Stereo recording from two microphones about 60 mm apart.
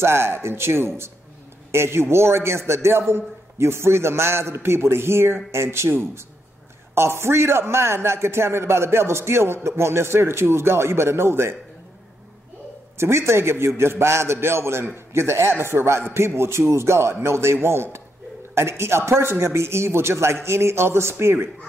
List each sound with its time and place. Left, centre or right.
0.0 s a man's voice: right
12.9 s a man's voice: right